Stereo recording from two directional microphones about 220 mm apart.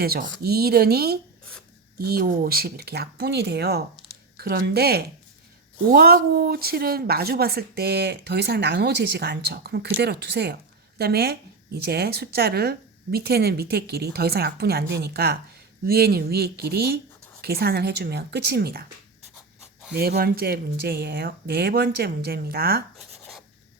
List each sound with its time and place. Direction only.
0.0 s speech: 45° right (ahead or behind)
19.9 s speech: 45° right (ahead or behind)